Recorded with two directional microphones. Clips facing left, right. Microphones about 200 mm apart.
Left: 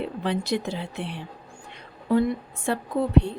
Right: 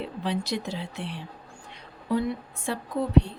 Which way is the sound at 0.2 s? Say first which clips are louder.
Left 2 dB; 55° left (ahead or behind).